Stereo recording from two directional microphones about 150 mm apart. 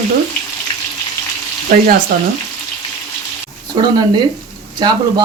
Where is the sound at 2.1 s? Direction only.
70° right (ahead or behind).